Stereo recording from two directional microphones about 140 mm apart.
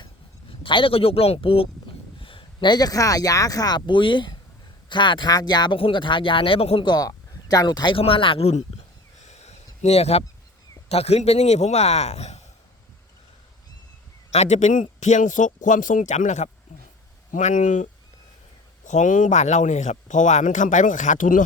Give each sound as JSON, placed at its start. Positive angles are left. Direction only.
{"t": 0.6, "sound": "speech", "side_deg": 35}
{"t": 6.8, "sound": "speech", "side_deg": 30}
{"t": 9.2, "sound": "a sound", "side_deg": 55}
{"t": 9.8, "sound": "speech", "side_deg": 50}
{"t": 14.3, "sound": "speech", "side_deg": 55}